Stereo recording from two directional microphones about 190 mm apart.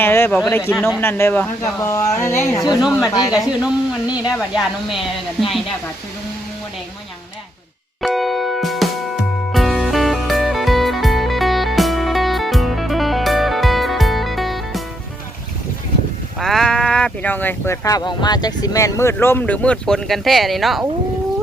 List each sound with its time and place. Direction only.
0.0 s speech: 10° left (ahead or behind)
3.3 s speech: 5° right (ahead or behind)
8.0 s music: centre (ahead or behind)
16.4 s speech: centre (ahead or behind)